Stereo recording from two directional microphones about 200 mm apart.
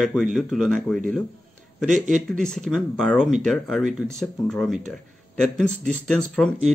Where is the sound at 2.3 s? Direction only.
5° left (ahead or behind).